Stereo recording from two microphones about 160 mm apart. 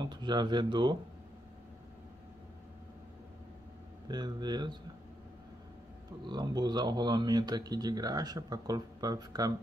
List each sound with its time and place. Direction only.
0.0 s speech: 30° right (ahead or behind)
4.1 s speech: 25° right (ahead or behind)
6.2 s speech: 25° right (ahead or behind)